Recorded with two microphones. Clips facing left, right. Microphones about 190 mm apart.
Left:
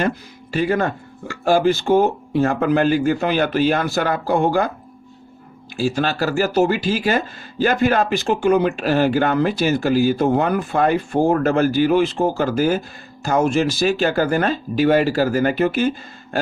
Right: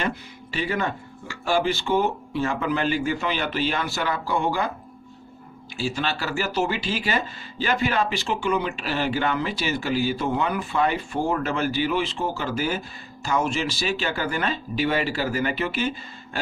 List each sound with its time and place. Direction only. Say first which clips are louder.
0.5 s speech: left 7 dB; 45° left (ahead or behind)
5.7 s speech: left 7 dB; 45° left (ahead or behind)